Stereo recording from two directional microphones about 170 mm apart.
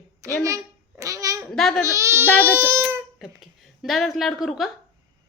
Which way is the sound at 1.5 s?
Centre (ahead or behind).